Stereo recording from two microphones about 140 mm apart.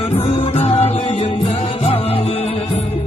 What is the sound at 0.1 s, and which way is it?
Music, 50° left (ahead or behind).